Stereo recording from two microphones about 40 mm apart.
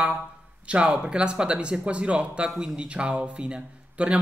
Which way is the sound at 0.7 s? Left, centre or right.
Right.